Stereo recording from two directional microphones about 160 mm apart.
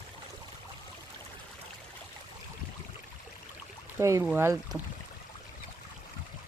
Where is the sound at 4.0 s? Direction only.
20° right (ahead or behind).